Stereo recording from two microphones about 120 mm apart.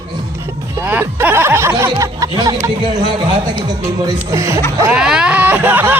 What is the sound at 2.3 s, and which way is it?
Speech, 35° right (ahead or behind).